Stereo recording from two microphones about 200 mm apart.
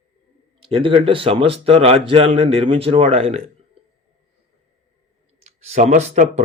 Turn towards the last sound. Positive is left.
turn(degrees=-35)  # may be behind; listen again after turning